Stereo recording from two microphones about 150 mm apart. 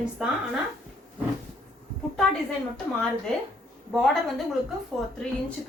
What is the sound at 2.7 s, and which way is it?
A woman's voice, 5° left (ahead or behind).